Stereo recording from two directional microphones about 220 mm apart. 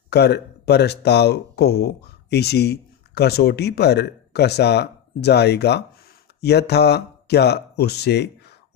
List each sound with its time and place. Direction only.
0.1 s speech: 50° left (ahead or behind)